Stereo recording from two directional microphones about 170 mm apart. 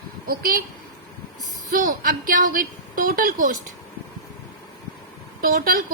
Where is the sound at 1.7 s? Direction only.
55° right (ahead or behind).